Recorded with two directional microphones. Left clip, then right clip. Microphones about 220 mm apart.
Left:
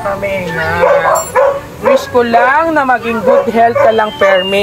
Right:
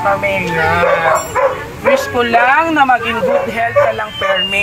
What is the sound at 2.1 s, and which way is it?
Speech, 20° left (ahead or behind).